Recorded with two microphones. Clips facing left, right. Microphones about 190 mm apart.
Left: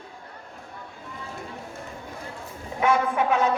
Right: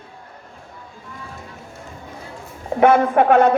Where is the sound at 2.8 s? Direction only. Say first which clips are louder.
Right 8 dB; 55° right (ahead or behind).